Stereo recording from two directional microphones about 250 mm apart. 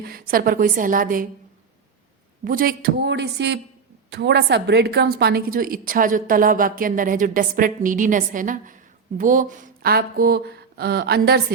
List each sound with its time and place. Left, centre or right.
0.0 s a woman's voice: right
2.4 s a woman's voice: right